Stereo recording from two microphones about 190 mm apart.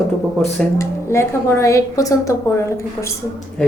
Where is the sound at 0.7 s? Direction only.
15° left (ahead or behind).